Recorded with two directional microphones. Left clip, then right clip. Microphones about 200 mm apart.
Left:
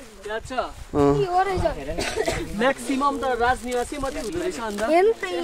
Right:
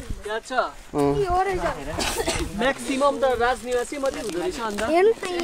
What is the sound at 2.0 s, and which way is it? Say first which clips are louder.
Speech: left 1 dB; 55° right (ahead or behind).